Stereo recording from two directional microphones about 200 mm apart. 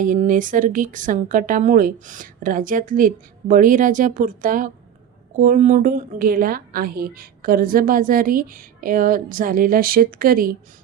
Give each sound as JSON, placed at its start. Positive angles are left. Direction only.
{"t": 0.0, "sound": "a woman's voice", "side_deg": -40}